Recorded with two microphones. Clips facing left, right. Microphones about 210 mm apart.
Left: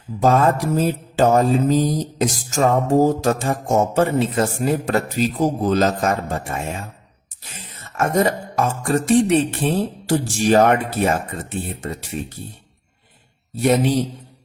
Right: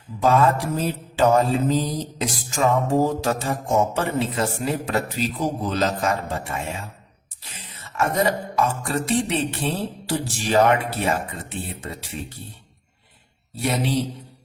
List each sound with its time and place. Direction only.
0.2 s mantra: 45° left (ahead or behind)
7.9 s mantra: 45° left (ahead or behind)
13.6 s mantra: 45° left (ahead or behind)